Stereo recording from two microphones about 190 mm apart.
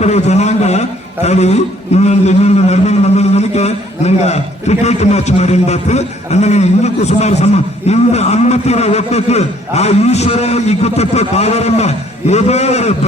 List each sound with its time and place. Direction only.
0.0 s a man's voice: 35° left (ahead or behind)